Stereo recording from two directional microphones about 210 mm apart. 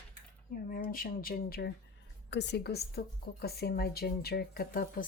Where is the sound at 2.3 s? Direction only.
55° left (ahead or behind).